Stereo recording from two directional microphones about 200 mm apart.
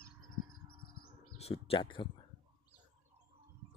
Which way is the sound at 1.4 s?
30° left (ahead or behind).